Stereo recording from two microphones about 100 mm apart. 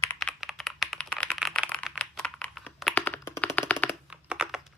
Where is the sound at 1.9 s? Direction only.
10° left (ahead or behind).